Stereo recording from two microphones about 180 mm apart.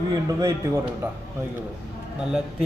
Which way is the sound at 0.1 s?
20° right (ahead or behind).